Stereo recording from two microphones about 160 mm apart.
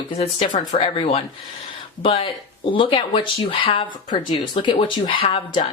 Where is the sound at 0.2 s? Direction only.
35° left (ahead or behind).